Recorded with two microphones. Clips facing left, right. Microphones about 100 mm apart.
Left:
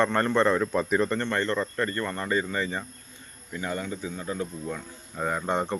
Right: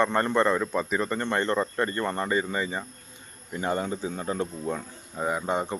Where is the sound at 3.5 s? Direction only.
30° right (ahead or behind).